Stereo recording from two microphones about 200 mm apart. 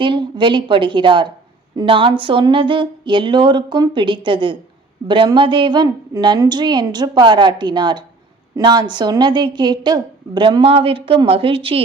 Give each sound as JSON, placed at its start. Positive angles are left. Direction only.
{"t": 0.0, "sound": "a woman's voice", "side_deg": -25}